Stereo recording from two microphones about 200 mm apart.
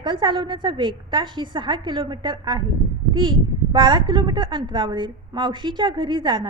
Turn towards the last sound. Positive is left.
turn(degrees=-25)  # may be behind; listen again after turning